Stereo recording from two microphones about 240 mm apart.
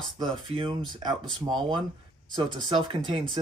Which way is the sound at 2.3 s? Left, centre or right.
Centre.